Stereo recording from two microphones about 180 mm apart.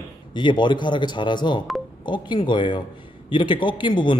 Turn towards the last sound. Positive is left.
turn(degrees=25)  # may be behind; listen again after turning